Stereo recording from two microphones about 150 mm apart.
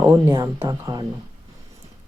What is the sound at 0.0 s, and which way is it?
Speech, 20° right (ahead or behind).